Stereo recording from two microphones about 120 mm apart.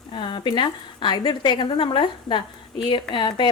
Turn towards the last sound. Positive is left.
turn(degrees=5)  # may be behind; listen again after turning